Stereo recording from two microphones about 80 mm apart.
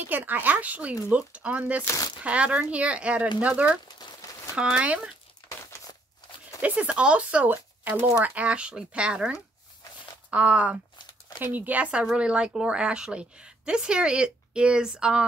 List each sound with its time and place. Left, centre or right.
0.1 s a woman's voice: right
6.6 s a woman's voice: centre